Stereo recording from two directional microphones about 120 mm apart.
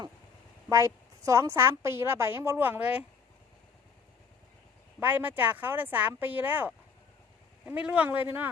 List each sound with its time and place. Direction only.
0.7 s a woman's voice: 25° right (ahead or behind)
4.9 s speech: 15° right (ahead or behind)